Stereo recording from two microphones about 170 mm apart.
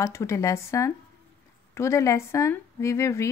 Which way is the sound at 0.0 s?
15° left (ahead or behind).